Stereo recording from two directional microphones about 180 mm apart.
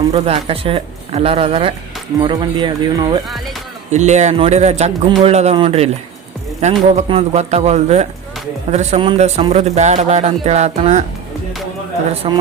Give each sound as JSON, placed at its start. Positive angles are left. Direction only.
{"t": 0.1, "sound": "speech", "side_deg": -30}
{"t": 3.9, "sound": "speech", "side_deg": -40}
{"t": 12.2, "sound": "speech", "side_deg": -25}